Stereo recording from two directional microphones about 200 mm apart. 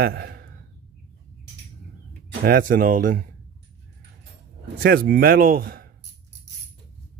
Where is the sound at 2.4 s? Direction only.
45° right (ahead or behind).